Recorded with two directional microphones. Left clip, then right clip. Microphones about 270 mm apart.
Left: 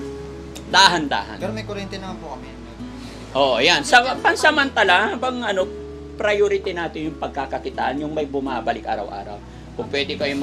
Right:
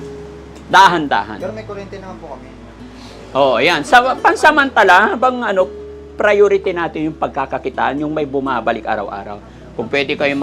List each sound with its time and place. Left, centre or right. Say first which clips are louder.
0.7 s a man's voice: right 5 dB; right
3.3 s a man's voice: right 4 dB; right
9.9 s speech: right 7 dB; right